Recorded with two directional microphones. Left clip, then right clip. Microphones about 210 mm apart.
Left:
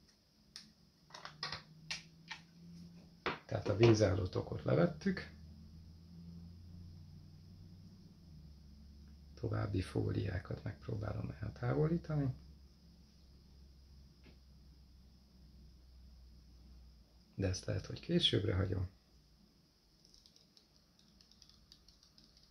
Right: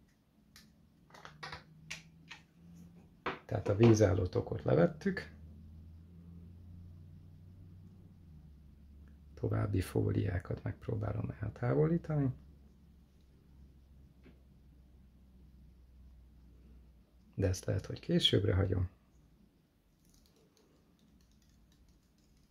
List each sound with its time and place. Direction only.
3.4 s speech: 40° right (ahead or behind)
9.3 s speech: 45° right (ahead or behind)
17.4 s speech: 40° right (ahead or behind)